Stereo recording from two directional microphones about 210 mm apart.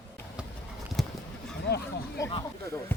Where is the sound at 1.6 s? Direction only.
50° left (ahead or behind).